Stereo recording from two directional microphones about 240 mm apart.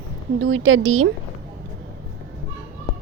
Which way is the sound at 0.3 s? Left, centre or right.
Right.